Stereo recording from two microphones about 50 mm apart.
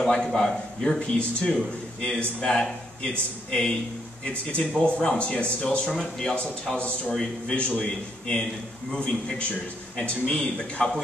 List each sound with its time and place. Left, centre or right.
0.3 s a man's voice: centre
5.9 s a man's voice: centre